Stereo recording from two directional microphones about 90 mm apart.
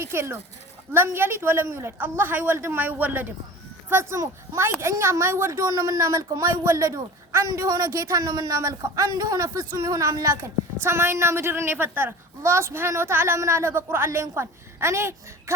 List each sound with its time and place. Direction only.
0.0 s a child's voice: 30° right (ahead or behind)